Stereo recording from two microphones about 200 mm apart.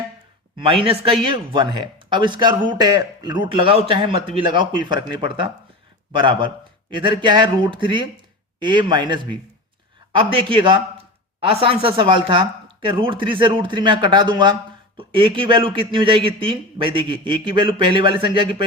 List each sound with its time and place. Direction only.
0.6 s speech: 25° right (ahead or behind)